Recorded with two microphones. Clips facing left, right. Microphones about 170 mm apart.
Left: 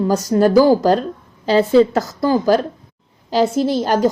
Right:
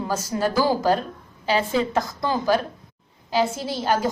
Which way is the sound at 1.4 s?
40° left (ahead or behind).